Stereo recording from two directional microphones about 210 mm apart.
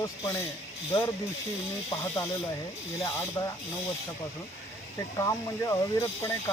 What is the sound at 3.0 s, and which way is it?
Speech, 15° left (ahead or behind).